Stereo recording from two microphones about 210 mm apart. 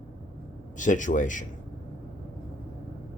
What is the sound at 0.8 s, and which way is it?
Speech, 35° left (ahead or behind).